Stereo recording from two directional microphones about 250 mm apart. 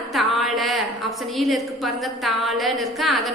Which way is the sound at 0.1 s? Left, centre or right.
Centre.